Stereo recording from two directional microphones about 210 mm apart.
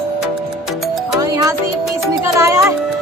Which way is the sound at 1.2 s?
20° right (ahead or behind).